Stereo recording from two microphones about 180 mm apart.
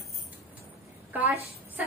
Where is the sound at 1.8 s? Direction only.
5° right (ahead or behind).